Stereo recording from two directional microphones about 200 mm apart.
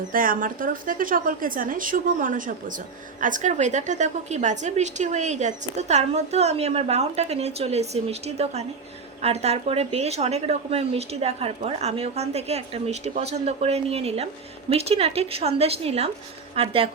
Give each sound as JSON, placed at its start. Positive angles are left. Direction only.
{"t": 0.1, "sound": "a woman's voice", "side_deg": -45}